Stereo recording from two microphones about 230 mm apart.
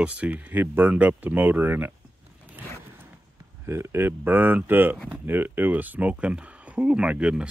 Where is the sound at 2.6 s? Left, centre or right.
Centre.